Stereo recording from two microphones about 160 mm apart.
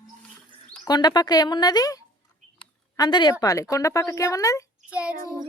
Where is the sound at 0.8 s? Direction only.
25° left (ahead or behind).